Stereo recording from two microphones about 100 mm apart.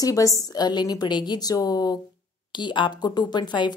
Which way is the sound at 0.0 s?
35° left (ahead or behind).